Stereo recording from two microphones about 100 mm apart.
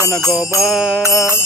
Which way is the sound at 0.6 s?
Centre (ahead or behind).